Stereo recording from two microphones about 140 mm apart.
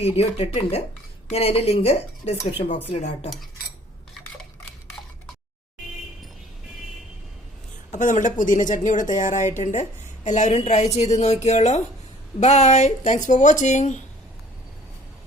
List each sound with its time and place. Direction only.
0.0 s speech: 45° left (ahead or behind)
7.9 s speech: 65° left (ahead or behind)